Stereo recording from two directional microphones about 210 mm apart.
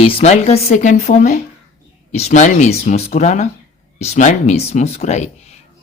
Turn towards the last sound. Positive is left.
turn(degrees=30)  # may be behind; listen again after turning